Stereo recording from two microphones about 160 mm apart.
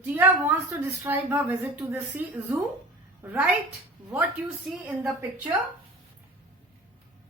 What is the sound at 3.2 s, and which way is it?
Speech, 10° right (ahead or behind).